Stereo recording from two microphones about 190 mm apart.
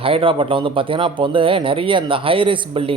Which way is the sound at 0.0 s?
30° right (ahead or behind).